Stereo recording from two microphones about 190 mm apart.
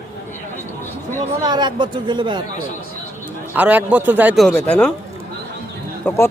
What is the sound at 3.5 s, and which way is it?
Speech, 10° right (ahead or behind).